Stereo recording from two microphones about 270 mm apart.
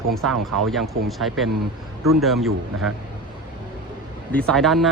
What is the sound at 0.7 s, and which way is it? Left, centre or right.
Speech, centre.